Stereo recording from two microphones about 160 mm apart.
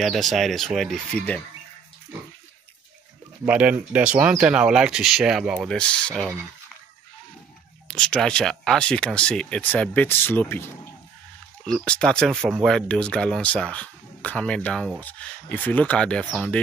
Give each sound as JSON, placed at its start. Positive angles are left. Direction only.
{"t": 0.0, "sound": "speech", "side_deg": 0}
{"t": 3.4, "sound": "speech", "side_deg": -10}
{"t": 7.9, "sound": "speech", "side_deg": 5}